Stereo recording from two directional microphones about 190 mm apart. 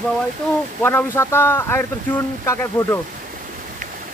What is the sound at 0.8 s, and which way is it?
Speech, 10° left (ahead or behind).